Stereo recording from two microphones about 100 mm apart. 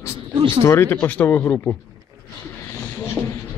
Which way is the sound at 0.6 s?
25° left (ahead or behind).